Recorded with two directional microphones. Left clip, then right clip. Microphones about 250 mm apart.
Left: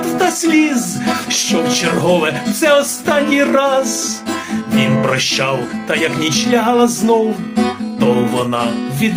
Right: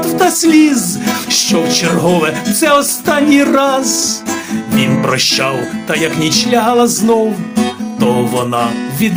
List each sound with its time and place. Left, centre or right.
0.2 s music: right
4.8 s music: right